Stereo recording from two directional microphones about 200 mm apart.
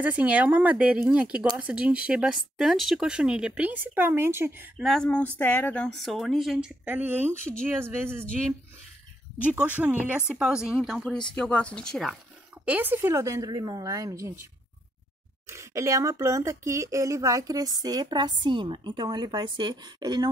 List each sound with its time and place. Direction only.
0.0 s a woman's voice: 5° right (ahead or behind)
4.8 s a woman's voice: 5° left (ahead or behind)
9.4 s a woman's voice: 5° right (ahead or behind)
12.6 s a woman's voice: 10° right (ahead or behind)
15.4 s speech: 15° right (ahead or behind)